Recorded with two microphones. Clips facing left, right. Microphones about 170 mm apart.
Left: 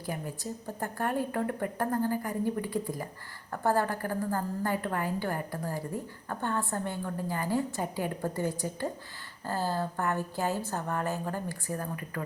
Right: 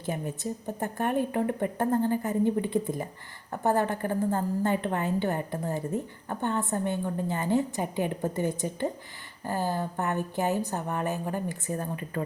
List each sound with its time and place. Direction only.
0.0 s a woman's voice: 25° right (ahead or behind)